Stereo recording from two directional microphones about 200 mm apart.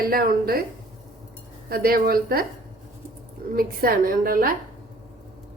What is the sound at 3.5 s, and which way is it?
A woman's voice, 45° right (ahead or behind).